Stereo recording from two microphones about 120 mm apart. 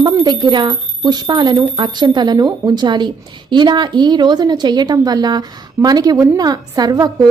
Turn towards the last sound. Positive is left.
turn(degrees=-35)  # may be behind; listen again after turning